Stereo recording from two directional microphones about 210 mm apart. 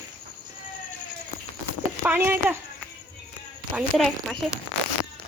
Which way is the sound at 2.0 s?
10° right (ahead or behind).